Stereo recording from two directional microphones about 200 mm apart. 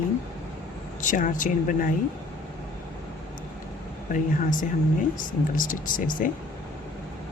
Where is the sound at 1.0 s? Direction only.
40° left (ahead or behind).